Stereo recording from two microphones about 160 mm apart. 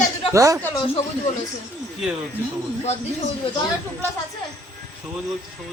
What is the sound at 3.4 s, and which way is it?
Speech, 35° left (ahead or behind).